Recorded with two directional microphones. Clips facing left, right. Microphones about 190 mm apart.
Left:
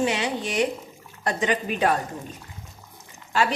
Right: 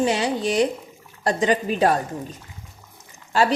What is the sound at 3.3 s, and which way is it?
Speech, 35° right (ahead or behind).